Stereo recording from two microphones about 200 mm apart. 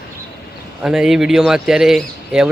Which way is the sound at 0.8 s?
5° right (ahead or behind).